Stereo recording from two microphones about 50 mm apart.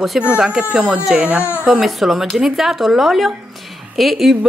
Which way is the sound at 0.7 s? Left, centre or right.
Centre.